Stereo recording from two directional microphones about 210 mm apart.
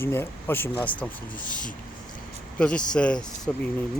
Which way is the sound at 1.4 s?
40° left (ahead or behind).